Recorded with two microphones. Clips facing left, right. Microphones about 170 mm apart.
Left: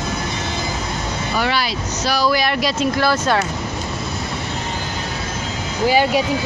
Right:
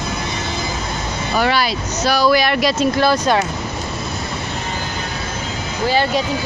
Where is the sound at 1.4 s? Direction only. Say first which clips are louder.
Right 4 dB; 50° right (ahead or behind); by 2.8 s 65° right (ahead or behind).